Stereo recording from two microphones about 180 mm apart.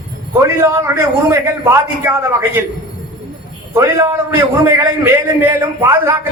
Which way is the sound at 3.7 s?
15° right (ahead or behind).